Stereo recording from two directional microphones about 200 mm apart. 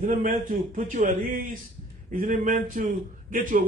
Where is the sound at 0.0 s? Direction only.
45° right (ahead or behind).